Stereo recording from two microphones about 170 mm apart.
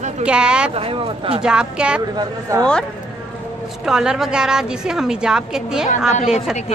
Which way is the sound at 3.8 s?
5° right (ahead or behind).